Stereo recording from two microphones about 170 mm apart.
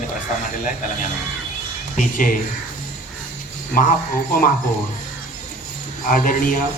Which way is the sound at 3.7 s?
55° left (ahead or behind).